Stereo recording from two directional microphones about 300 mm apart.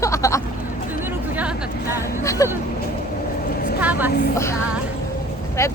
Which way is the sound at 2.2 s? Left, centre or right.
Centre.